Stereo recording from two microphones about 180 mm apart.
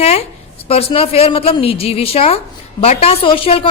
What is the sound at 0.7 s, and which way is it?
A woman's voice, 35° left (ahead or behind).